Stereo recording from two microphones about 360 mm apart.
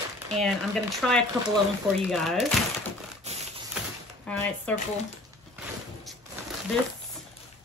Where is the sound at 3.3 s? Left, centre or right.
Centre.